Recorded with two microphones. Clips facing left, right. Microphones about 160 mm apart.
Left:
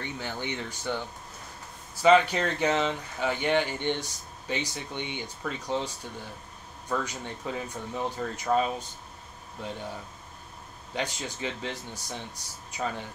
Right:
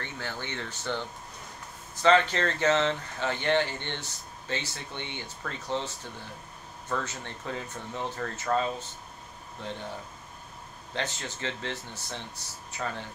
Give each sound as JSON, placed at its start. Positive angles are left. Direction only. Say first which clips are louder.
{"t": 0.0, "sound": "speech", "louder": "left 3 dB", "side_deg": 15}
{"t": 6.9, "sound": "speech", "louder": "left 2 dB", "side_deg": 15}
{"t": 10.9, "sound": "speech", "louder": "left 1 dB", "side_deg": 10}